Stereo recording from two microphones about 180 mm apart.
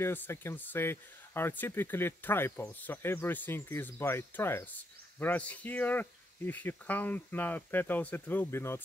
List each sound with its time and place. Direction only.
0.0 s speech: 10° left (ahead or behind)